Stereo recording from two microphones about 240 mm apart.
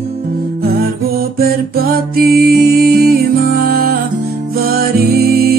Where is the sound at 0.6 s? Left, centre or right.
Right.